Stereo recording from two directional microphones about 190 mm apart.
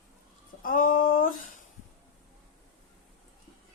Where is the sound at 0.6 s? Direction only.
45° left (ahead or behind).